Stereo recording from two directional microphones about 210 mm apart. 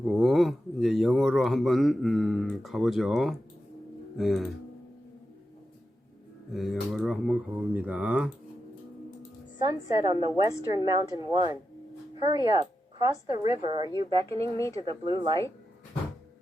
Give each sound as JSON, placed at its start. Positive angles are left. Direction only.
{"t": 0.0, "sound": "speech", "side_deg": 0}
{"t": 6.5, "sound": "speech", "side_deg": 0}
{"t": 9.6, "sound": "a woman's voice", "side_deg": -20}